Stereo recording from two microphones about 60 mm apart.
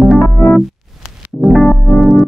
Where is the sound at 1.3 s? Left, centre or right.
Right.